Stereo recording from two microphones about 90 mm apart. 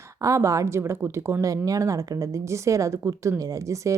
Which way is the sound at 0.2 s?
35° right (ahead or behind).